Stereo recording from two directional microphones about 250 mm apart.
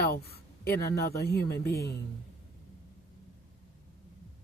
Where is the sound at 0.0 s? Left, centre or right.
Left.